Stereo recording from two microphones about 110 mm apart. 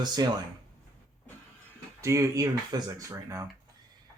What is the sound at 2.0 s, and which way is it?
Speech, 30° right (ahead or behind).